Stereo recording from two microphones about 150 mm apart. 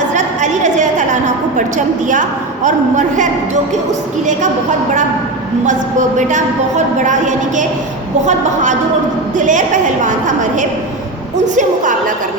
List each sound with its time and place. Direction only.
0.1 s a sound: 55° right (ahead or behind)
2.6 s a woman's voice: 55° right (ahead or behind)
5.6 s a woman's voice: 55° right (ahead or behind)